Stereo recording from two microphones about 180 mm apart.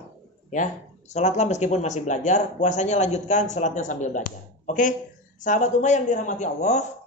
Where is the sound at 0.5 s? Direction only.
40° left (ahead or behind).